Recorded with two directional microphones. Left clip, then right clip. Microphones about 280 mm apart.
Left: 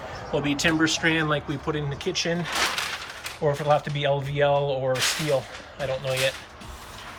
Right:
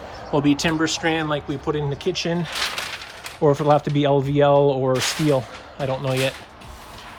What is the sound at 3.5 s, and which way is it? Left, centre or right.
Speech, right.